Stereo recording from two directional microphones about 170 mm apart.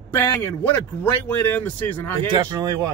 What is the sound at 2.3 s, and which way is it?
Speech, 25° right (ahead or behind).